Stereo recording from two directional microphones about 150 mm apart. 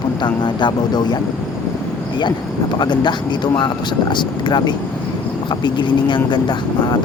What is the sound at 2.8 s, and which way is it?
Speech, 30° left (ahead or behind).